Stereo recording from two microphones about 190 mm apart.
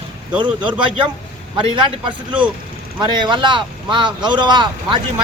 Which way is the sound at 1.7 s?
25° right (ahead or behind).